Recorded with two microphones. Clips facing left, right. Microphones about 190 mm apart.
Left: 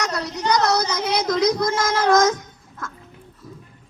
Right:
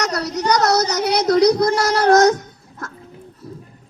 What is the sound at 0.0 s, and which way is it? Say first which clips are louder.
Speech: right 4 dB; 40° right (ahead or behind).